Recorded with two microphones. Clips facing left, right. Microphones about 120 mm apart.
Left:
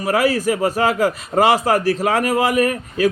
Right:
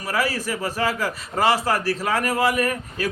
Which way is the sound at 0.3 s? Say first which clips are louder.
Left 8 dB; 50° left (ahead or behind).